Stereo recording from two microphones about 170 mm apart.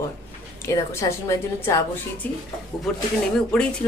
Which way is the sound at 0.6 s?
15° left (ahead or behind).